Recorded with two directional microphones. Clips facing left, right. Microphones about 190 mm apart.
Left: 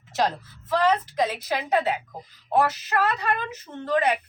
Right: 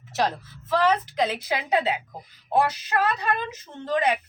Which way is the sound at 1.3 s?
15° right (ahead or behind).